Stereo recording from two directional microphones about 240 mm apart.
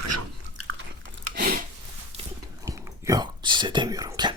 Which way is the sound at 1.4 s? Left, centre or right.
Right.